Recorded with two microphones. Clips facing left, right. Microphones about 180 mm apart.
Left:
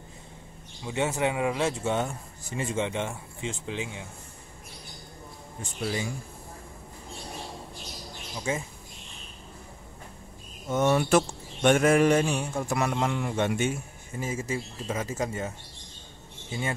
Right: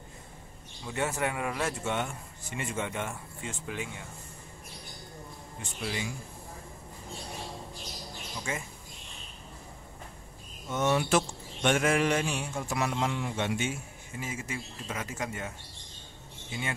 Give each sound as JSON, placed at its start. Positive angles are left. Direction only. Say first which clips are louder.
{"t": 0.8, "sound": "speech", "louder": "left 4 dB", "side_deg": 20}
{"t": 2.0, "sound": "speech", "louder": "left 4 dB", "side_deg": 35}
{"t": 5.6, "sound": "speech", "louder": "left 4 dB", "side_deg": 40}
{"t": 10.7, "sound": "a man's voice", "louder": "left 4 dB", "side_deg": 45}